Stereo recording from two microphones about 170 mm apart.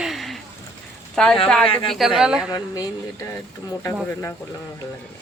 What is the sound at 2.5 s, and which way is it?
Speech, 20° left (ahead or behind).